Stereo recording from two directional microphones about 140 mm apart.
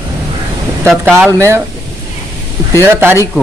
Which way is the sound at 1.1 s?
20° right (ahead or behind).